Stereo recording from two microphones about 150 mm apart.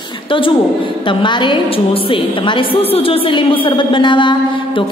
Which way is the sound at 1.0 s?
30° left (ahead or behind).